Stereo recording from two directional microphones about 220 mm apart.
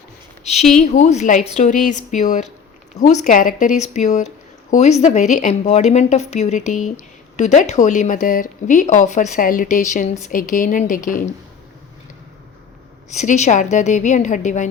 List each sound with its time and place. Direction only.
0.4 s speech: 30° left (ahead or behind)
13.1 s speech: 30° left (ahead or behind)